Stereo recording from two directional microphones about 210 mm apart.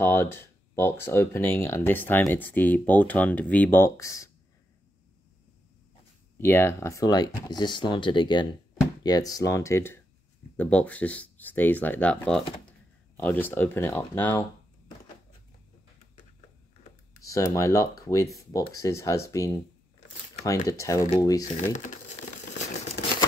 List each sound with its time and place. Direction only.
0.0 s speech: 10° left (ahead or behind)
6.3 s speech: 10° left (ahead or behind)
17.2 s speech: 15° left (ahead or behind)
21.5 s crumpling: 35° left (ahead or behind)